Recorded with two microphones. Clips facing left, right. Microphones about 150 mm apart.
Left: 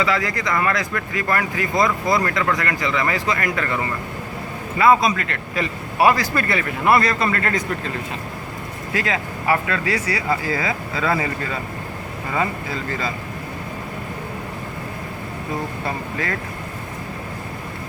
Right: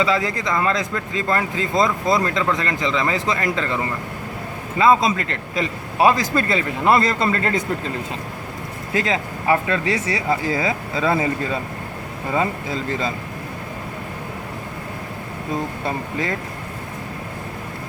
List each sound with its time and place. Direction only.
0.0 s speech: 20° right (ahead or behind)
4.8 s speech: 20° right (ahead or behind)
8.9 s speech: 25° right (ahead or behind)
12.3 s speech: 20° right (ahead or behind)
16.1 s speech: 20° right (ahead or behind)